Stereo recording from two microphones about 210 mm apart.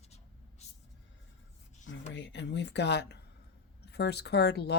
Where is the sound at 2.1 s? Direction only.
55° left (ahead or behind).